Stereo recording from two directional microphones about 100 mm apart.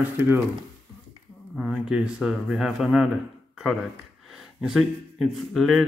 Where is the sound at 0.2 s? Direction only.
25° right (ahead or behind).